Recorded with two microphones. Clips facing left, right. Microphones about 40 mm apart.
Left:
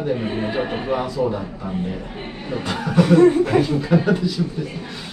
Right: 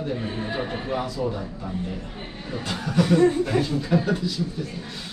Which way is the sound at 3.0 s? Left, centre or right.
Left.